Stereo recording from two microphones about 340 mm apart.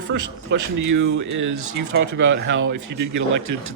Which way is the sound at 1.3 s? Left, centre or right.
Right.